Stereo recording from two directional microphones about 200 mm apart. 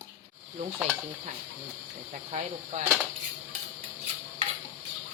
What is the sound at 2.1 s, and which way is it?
Speech, 35° right (ahead or behind).